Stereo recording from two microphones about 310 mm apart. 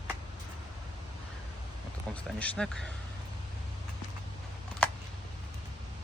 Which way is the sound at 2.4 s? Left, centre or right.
Centre.